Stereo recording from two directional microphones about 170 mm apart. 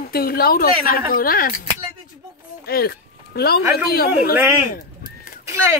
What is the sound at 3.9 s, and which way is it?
Speech, 65° left (ahead or behind).